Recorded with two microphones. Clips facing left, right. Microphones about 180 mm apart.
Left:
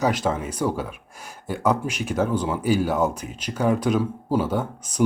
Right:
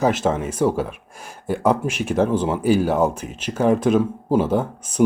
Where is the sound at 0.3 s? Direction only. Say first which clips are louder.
Right 4 dB; 25° right (ahead or behind).